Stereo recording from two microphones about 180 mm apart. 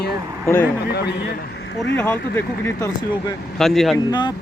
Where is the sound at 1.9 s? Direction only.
10° left (ahead or behind).